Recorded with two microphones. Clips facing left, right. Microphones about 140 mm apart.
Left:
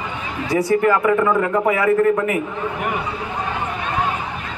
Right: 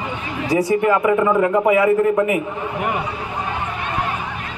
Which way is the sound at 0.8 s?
10° right (ahead or behind).